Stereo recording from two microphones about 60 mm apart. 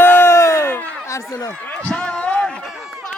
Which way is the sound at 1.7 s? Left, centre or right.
Centre.